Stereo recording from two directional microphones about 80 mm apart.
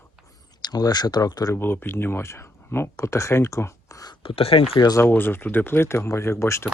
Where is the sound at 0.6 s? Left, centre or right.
Left.